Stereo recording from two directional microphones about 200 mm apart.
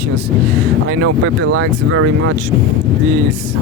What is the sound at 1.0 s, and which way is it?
Speech, 85° right.